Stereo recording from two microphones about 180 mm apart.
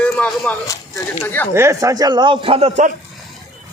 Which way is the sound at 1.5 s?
15° right (ahead or behind).